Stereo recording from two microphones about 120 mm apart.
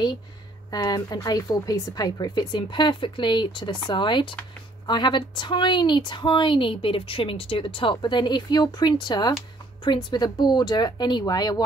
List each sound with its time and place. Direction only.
0.7 s speech: 35° left (ahead or behind)